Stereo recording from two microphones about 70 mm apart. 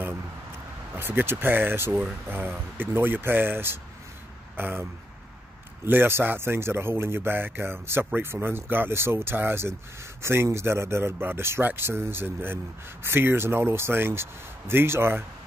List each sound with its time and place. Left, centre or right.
0.9 s speech: right
5.9 s speech: right